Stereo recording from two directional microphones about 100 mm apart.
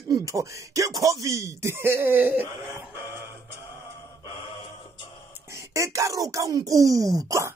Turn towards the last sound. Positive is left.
turn(degrees=-30)  # may be behind; listen again after turning